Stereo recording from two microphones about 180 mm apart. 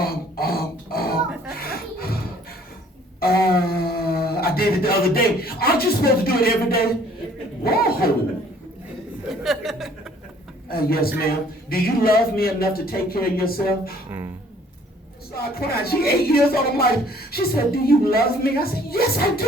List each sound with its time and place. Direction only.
0.0 s a sound: 55° left (ahead or behind)
3.2 s a sound: 55° left (ahead or behind)
7.6 s zipper: 55° left (ahead or behind)
9.3 s chuckle: centre (ahead or behind)
10.7 s a man's voice: 55° left (ahead or behind)
15.4 s a man's voice: 60° left (ahead or behind)